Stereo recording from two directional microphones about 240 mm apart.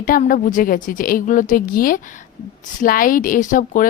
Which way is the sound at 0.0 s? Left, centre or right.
Left.